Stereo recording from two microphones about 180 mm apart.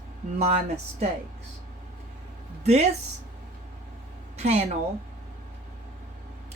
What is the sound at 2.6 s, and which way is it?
Speech, 35° right (ahead or behind).